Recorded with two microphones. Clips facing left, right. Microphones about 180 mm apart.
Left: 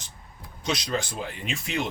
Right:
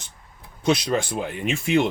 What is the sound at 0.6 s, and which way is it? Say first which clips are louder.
Speech: right 7 dB; 55° right (ahead or behind).